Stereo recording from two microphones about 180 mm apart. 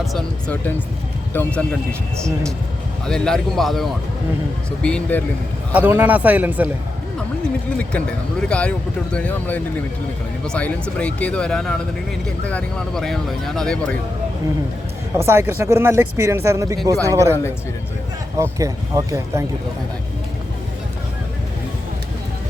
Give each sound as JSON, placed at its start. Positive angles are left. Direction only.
{"t": 0.0, "sound": "speech", "side_deg": 0}
{"t": 5.7, "sound": "speech", "side_deg": -10}
{"t": 7.8, "sound": "speech", "side_deg": 5}
{"t": 15.1, "sound": "speech", "side_deg": -15}
{"t": 18.3, "sound": "speech", "side_deg": -15}